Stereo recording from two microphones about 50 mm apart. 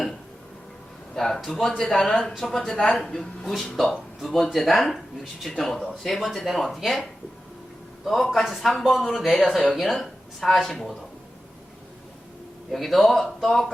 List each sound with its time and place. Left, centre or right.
1.1 s speech: centre
12.7 s speech: centre